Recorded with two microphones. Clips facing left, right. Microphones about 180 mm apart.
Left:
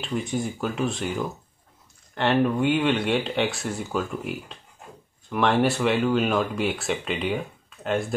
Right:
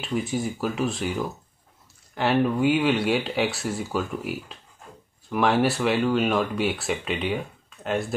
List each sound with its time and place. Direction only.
0.0 s speech: centre (ahead or behind)